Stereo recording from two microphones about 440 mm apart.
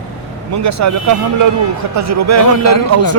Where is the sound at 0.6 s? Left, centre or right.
Right.